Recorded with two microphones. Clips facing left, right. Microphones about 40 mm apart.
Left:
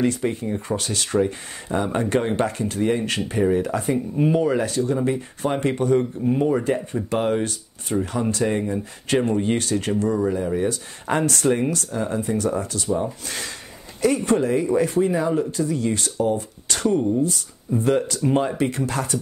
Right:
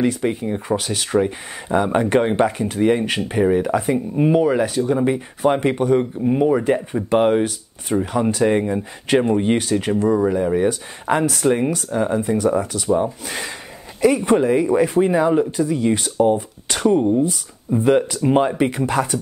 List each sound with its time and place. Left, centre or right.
0.2 s speech: right
0.7 s speech: centre
1.7 s speech: right
7.4 s speech: centre
11.1 s speech: centre
12.8 s speech: right
14.0 s speech: centre
15.0 s speech: right
15.7 s speech: centre